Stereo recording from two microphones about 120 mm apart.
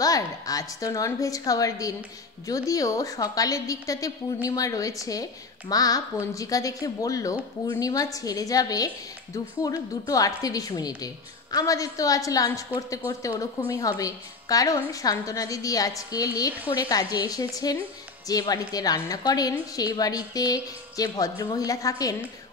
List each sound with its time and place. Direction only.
0.0 s a woman's voice: 30° left (ahead or behind)
10.0 s a woman's voice: 30° left (ahead or behind)